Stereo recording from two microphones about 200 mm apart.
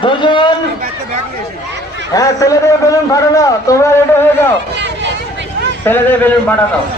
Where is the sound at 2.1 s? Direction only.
15° left (ahead or behind).